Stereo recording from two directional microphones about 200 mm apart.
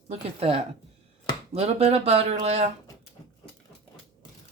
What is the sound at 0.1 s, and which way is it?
Speech, 30° right (ahead or behind).